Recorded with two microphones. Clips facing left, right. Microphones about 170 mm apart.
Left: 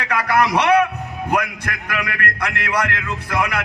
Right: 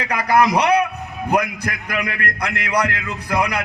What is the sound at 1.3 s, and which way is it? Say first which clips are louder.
A man's voice: right 2 dB; 40° right (ahead or behind).